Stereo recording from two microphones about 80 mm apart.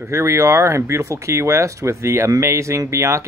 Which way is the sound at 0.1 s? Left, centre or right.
Right.